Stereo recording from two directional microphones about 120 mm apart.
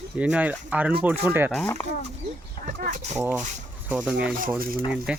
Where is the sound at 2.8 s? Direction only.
90° right.